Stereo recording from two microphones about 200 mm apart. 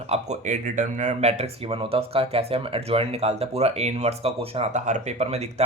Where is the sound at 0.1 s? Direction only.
35° right (ahead or behind).